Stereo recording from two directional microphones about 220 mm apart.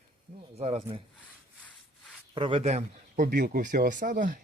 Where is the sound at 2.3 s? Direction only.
20° right (ahead or behind).